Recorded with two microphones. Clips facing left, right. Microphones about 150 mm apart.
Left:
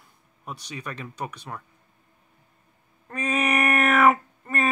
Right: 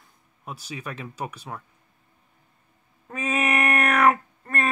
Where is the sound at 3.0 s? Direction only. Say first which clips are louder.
Even; 5° right (ahead or behind).